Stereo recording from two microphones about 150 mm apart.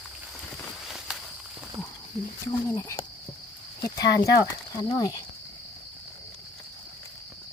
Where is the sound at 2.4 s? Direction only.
20° left (ahead or behind).